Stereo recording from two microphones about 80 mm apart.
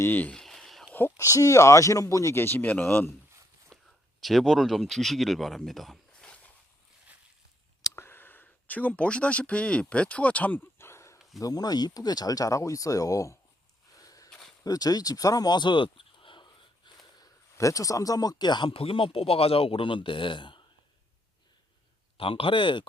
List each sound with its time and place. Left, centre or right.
0.0 s speech: left
0.3 s a sound: centre
0.9 s speech: left
2.4 s speech: left
3.7 s a sound: centre
4.2 s speech: centre
6.2 s a sound: centre
7.9 s speech: left
11.3 s speech: left
13.9 s walk: left
14.6 s a sound: left
17.6 s speech: left
19.8 s speech: left
22.4 s speech: left